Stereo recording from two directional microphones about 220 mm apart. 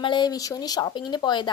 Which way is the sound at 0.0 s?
20° left (ahead or behind).